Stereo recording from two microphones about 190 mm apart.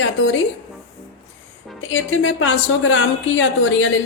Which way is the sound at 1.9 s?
85° left.